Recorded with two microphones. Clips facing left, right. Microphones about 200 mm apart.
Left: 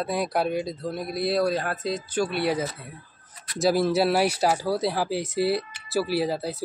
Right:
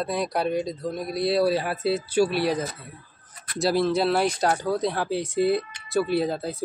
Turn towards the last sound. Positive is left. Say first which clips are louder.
# right 1 dB
turn(degrees=5)  # may be behind; listen again after turning